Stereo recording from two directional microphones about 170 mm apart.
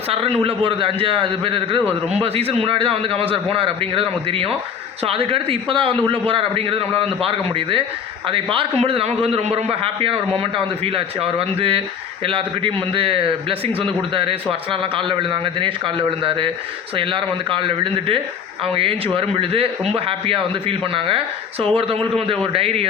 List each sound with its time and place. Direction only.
0.1 s a man's voice: 35° right (ahead or behind)